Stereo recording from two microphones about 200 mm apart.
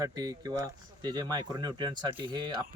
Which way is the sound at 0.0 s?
20° right (ahead or behind).